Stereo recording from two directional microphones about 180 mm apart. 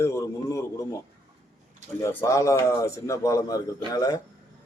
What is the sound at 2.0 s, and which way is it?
A man's voice, 15° left (ahead or behind).